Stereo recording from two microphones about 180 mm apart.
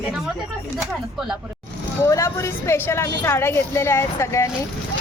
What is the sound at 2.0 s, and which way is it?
Speech, 15° left (ahead or behind).